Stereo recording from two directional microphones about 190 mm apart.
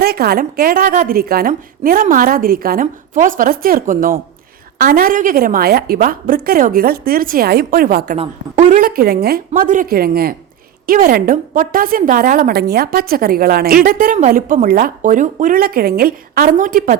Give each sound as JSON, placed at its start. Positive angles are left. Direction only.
{"t": 0.0, "sound": "a woman's voice", "side_deg": -55}
{"t": 9.5, "sound": "a woman's voice", "side_deg": -40}